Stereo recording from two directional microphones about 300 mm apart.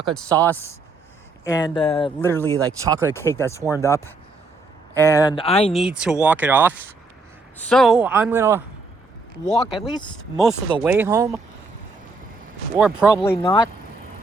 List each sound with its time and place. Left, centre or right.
0.3 s speech: centre
1.5 s speech: centre
2.5 s speech: centre
3.2 s speech: centre
5.7 s speech: centre
10.8 s speech: centre
12.7 s speech: centre
13.3 s speech: centre